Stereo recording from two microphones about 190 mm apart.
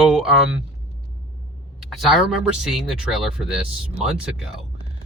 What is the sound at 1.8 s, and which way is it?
Speech, centre (ahead or behind).